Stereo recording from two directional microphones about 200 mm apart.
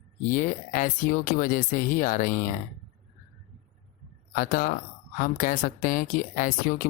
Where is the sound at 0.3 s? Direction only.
40° left (ahead or behind).